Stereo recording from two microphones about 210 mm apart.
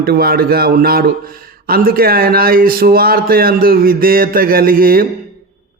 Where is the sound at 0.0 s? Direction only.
45° right (ahead or behind).